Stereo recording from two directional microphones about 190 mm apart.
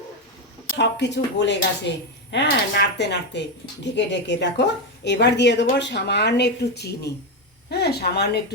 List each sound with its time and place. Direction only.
0.8 s a woman's voice: 65° left (ahead or behind)